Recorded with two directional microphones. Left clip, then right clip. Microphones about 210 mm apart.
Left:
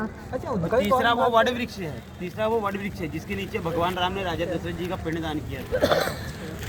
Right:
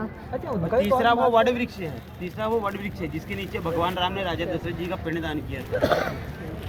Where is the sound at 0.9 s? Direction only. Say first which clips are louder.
Right 1 dB; 45° left (ahead or behind).